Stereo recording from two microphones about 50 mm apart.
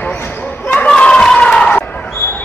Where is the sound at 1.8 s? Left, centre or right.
Left.